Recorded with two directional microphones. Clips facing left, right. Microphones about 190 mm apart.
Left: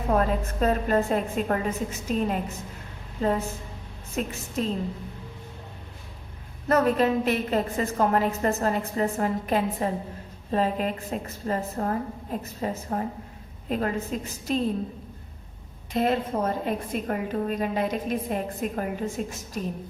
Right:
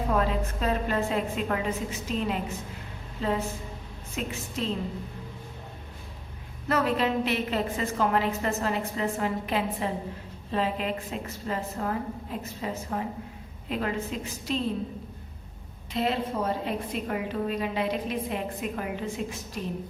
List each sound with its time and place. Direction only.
0.1 s a woman's voice: 45° left (ahead or behind)
6.7 s a woman's voice: 45° left (ahead or behind)
15.9 s a woman's voice: 50° left (ahead or behind)